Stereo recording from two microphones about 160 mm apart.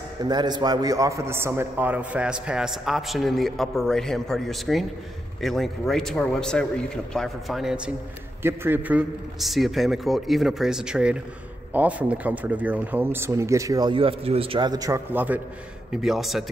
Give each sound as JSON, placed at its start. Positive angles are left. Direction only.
{"t": 0.2, "sound": "a man's voice", "side_deg": -25}
{"t": 15.1, "sound": "a man's voice", "side_deg": -10}